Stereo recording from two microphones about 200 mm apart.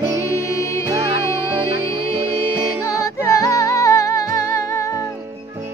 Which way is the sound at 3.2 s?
15° left (ahead or behind).